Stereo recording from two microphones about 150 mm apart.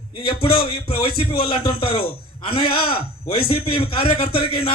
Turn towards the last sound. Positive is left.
turn(degrees=40)  # may be behind; listen again after turning